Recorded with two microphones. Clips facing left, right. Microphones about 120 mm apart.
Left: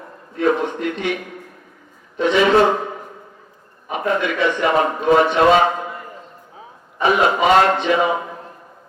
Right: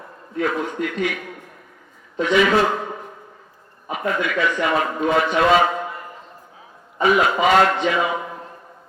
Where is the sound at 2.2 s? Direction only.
30° left (ahead or behind).